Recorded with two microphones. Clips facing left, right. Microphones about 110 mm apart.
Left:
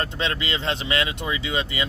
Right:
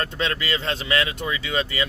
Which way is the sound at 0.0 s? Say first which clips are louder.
Right 1 dB; 20° left (ahead or behind).